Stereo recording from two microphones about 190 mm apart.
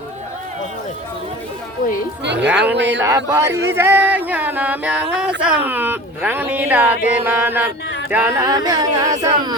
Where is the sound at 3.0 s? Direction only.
15° right (ahead or behind).